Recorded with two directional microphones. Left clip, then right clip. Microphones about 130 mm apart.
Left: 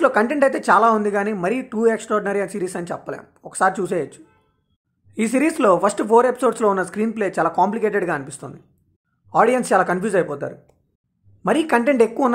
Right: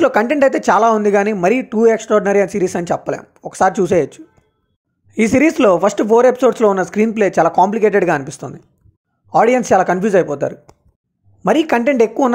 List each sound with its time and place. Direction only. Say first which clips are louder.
0.0 s speech: right 4 dB; 40° right (ahead or behind)